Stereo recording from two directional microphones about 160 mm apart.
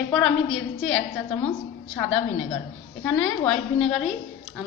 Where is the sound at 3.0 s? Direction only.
5° left (ahead or behind).